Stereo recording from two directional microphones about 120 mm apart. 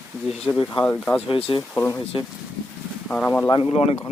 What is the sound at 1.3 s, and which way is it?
Speech, 45° left (ahead or behind).